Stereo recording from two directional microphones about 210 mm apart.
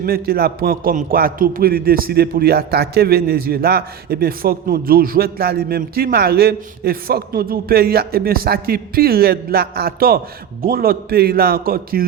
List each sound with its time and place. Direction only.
0.0 s a man's voice: 45° right (ahead or behind)